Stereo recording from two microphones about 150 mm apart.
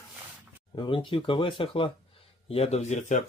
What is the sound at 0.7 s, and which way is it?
Speech, 30° left (ahead or behind).